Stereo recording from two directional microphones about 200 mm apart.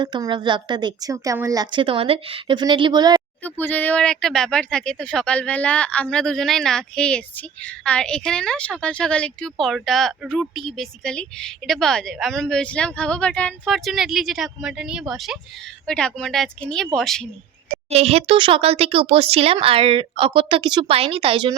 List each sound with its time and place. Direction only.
0.0 s speech: 20° right (ahead or behind)
3.4 s speech: 10° left (ahead or behind)
17.8 s speech: 30° right (ahead or behind)